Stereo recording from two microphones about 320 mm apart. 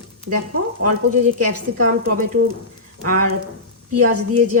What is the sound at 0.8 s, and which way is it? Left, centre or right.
A woman's voice, right.